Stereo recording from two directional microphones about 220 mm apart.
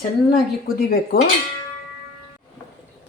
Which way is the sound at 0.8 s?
40° left (ahead or behind).